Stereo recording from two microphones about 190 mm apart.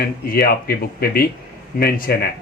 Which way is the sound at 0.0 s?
50° left (ahead or behind).